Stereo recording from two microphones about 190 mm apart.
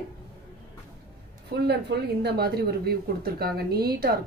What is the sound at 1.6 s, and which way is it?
A woman's voice, 60° right (ahead or behind).